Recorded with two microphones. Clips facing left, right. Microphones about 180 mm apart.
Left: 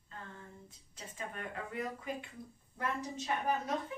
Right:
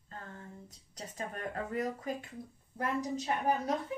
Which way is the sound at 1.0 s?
40° right (ahead or behind).